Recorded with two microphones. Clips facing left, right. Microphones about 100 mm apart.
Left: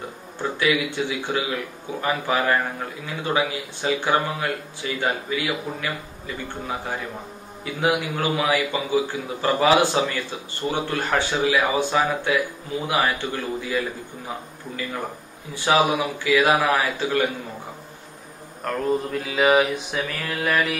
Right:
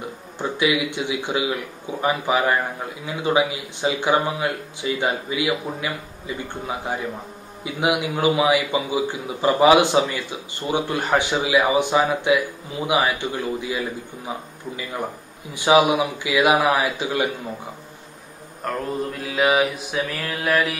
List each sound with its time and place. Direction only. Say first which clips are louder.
0.4 s a man's voice: right 1 dB; 20° right (ahead or behind)
7.6 s a man's voice: right 1 dB; 15° right (ahead or behind)
15.5 s a man's voice: right 3 dB; 15° right (ahead or behind)
18.6 s mantra: left 2 dB; centre (ahead or behind)